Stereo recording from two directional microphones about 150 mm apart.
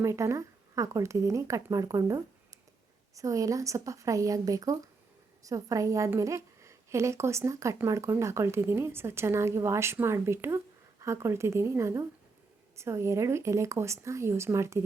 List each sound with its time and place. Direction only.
0.0 s a woman's voice: 20° right (ahead or behind)